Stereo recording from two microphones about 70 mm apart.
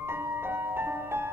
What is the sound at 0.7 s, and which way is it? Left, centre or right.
Music, right.